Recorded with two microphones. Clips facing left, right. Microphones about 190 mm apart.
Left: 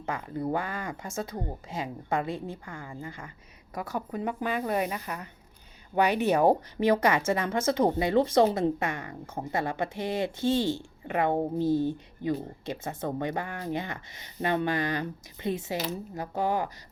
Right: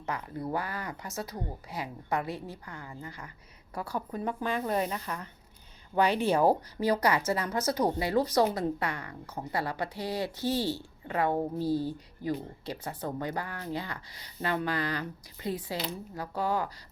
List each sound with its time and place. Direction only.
0.0 s speech: 25° left (ahead or behind)
3.8 s speech: 15° left (ahead or behind)